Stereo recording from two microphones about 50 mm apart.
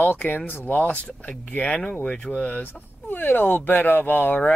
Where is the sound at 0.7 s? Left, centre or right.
Left.